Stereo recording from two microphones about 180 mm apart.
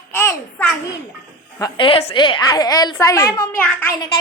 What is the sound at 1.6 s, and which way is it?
A woman's voice, 30° left (ahead or behind).